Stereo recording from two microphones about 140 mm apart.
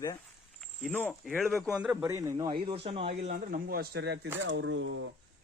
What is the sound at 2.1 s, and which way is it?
Speech, 25° right (ahead or behind).